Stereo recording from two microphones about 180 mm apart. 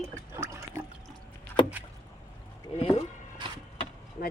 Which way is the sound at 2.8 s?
30° left (ahead or behind).